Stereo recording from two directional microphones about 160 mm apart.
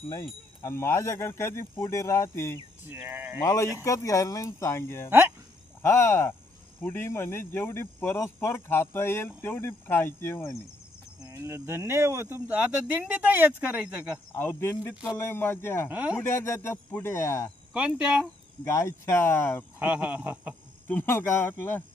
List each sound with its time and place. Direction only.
0.1 s speech: 20° left (ahead or behind)
2.9 s speech: 10° right (ahead or behind)
3.4 s speech: 20° left (ahead or behind)
11.3 s speech: 15° right (ahead or behind)
14.3 s speech: 15° left (ahead or behind)
15.9 s speech: 10° right (ahead or behind)
16.2 s speech: 15° left (ahead or behind)
17.7 s speech: 5° right (ahead or behind)
18.6 s speech: 20° left (ahead or behind)
19.8 s speech: 10° right (ahead or behind)
20.8 s speech: 15° left (ahead or behind)